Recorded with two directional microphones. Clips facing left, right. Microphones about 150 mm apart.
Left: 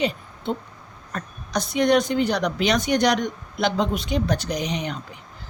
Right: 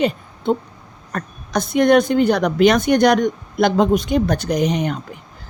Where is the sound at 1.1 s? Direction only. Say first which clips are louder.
Right 5 dB; 55° right (ahead or behind).